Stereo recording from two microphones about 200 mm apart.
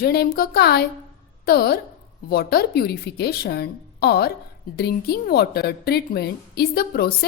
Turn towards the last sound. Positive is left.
turn(degrees=50)  # may be behind; listen again after turning